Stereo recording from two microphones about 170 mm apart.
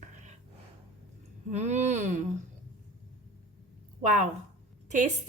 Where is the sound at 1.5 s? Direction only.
40° right (ahead or behind).